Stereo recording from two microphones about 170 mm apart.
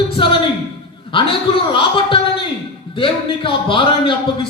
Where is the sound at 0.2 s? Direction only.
30° left (ahead or behind).